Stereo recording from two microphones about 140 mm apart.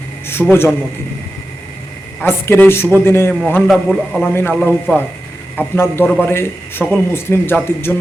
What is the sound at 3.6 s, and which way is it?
Speech, centre (ahead or behind).